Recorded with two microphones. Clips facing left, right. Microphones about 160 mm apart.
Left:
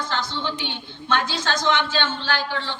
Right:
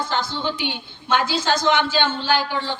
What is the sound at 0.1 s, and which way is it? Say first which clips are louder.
A woman's voice: right 3 dB; 10° right (ahead or behind).